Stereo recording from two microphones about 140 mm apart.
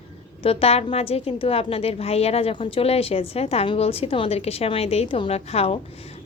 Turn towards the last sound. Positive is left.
turn(degrees=45)  # may be behind; listen again after turning